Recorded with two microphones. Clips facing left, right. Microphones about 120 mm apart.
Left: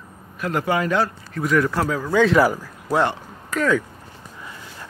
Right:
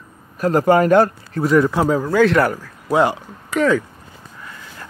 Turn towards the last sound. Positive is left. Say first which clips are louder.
# right 4 dB
turn(degrees=-5)  # may be behind; listen again after turning